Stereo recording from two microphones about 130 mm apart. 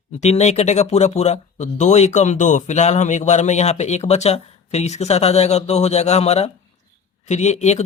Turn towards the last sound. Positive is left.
turn(degrees=60)  # may be behind; listen again after turning